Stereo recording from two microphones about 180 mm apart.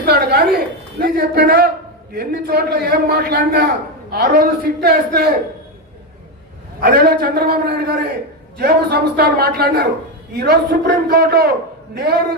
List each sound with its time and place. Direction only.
0.0 s a sound: 60° right (ahead or behind)
2.1 s a man's voice: 60° right (ahead or behind)
6.7 s a man's voice: 55° right (ahead or behind)